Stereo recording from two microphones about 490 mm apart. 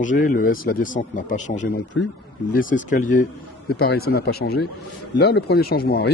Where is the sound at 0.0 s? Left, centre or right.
Centre.